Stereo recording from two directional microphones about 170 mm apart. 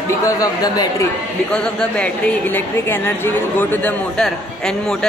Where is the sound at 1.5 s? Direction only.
5° left (ahead or behind).